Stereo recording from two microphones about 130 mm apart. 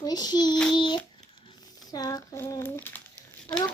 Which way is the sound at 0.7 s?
35° left (ahead or behind).